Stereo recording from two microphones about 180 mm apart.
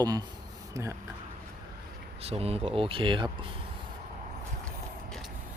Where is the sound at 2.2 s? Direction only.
35° right (ahead or behind).